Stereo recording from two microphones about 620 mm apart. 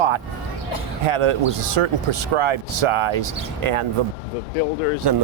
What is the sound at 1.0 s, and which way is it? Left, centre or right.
Speech, right.